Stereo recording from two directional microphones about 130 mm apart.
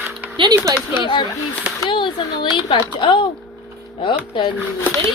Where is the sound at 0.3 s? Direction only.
35° right (ahead or behind).